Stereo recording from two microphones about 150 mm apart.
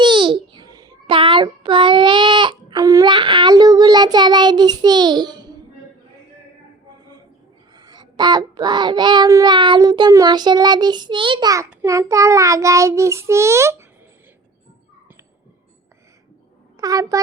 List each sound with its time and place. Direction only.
0.0 s a sound: 30° right (ahead or behind)
7.8 s child singing: 30° right (ahead or behind)
16.8 s child singing: 25° right (ahead or behind)